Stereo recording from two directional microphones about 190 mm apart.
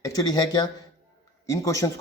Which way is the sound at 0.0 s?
20° left (ahead or behind).